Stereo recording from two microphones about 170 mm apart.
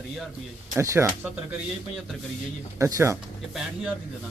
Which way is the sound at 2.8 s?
15° right (ahead or behind).